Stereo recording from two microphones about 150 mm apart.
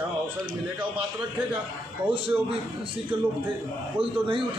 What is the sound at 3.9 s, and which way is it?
Speech, 35° right (ahead or behind).